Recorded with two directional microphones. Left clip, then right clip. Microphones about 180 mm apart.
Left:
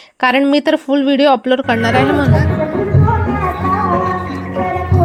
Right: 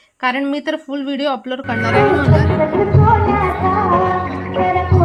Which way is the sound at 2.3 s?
Centre (ahead or behind).